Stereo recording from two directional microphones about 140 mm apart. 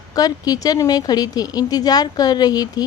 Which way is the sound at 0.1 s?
25° left (ahead or behind).